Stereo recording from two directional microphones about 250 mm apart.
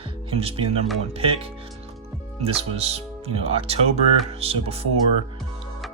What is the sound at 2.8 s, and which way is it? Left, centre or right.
Speech, right.